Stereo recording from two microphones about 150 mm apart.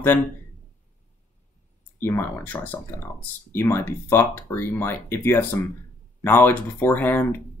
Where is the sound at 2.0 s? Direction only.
15° left (ahead or behind).